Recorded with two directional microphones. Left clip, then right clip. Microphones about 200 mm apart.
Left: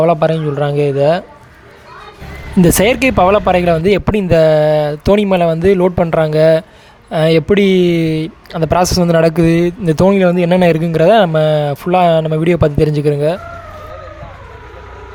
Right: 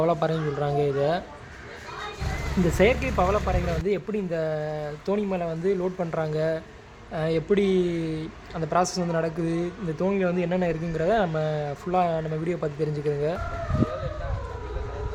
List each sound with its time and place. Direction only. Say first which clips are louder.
0.0 s a man's voice: left 12 dB; 35° left (ahead or behind)
2.6 s speech: left 11 dB; 60° left (ahead or behind); by 13.4 s 40° left (ahead or behind)